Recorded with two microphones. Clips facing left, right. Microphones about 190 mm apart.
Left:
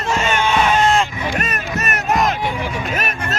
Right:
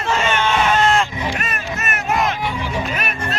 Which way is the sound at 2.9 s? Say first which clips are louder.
Left 1 dB; 45° left (ahead or behind).